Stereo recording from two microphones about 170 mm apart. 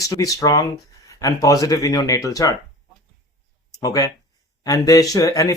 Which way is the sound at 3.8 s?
20° left (ahead or behind).